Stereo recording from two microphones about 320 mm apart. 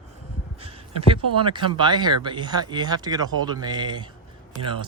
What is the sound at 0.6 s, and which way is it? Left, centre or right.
Speech, centre.